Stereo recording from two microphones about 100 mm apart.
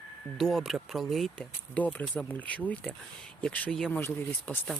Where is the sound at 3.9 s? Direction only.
15° left (ahead or behind).